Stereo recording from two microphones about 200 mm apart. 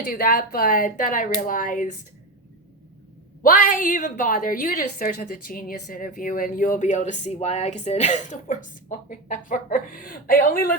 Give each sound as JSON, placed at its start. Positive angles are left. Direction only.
{"t": 0.1, "sound": "speech", "side_deg": 45}
{"t": 3.4, "sound": "a woman's voice", "side_deg": 45}